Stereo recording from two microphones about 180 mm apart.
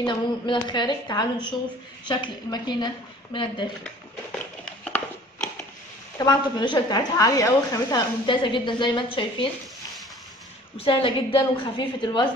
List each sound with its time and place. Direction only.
0.0 s a woman's voice: 25° left (ahead or behind)
3.8 s a sound: 5° left (ahead or behind)
6.1 s a woman's voice: 20° left (ahead or behind)
10.8 s a woman's voice: 30° left (ahead or behind)